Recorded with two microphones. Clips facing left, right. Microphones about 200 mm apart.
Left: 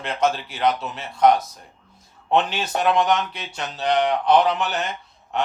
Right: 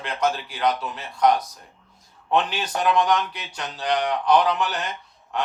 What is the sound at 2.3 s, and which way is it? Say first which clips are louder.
Speech: left 2 dB; 25° left (ahead or behind).